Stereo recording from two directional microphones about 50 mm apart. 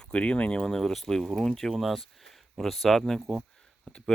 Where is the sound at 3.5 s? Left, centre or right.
Centre.